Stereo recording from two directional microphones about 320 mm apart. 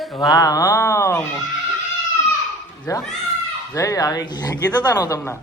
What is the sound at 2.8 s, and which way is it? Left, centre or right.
A man's voice, centre.